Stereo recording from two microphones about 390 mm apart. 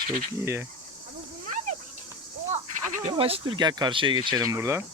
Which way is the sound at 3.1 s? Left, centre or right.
Centre.